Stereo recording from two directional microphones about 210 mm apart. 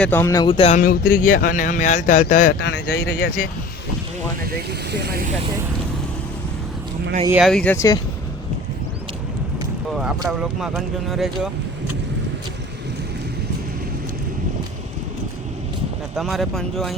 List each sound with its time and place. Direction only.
0.0 s speech: 10° left (ahead or behind); by 3.3 s 60° left (ahead or behind)
4.5 s speech: 50° right (ahead or behind)
7.3 s speech: centre (ahead or behind)
9.9 s speech: centre (ahead or behind)
16.1 s speech: centre (ahead or behind)